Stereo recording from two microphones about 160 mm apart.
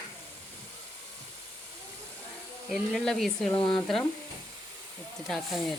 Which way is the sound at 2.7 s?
Centre (ahead or behind).